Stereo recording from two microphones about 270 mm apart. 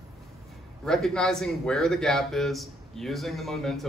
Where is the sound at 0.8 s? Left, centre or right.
Centre.